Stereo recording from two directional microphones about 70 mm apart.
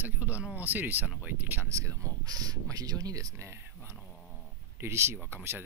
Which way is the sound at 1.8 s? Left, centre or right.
Right.